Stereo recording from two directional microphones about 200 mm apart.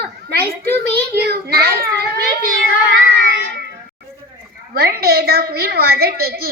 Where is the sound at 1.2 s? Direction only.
55° right (ahead or behind).